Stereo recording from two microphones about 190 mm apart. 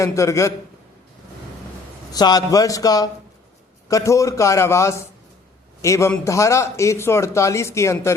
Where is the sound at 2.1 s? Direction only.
20° left (ahead or behind).